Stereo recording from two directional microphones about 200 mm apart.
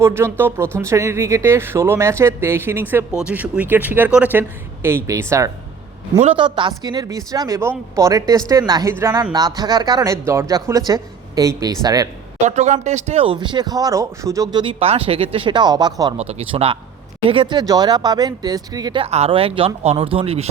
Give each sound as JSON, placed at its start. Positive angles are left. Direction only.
{"t": 0.0, "sound": "speech", "side_deg": -10}
{"t": 6.1, "sound": "speech", "side_deg": -30}
{"t": 12.5, "sound": "speech", "side_deg": -35}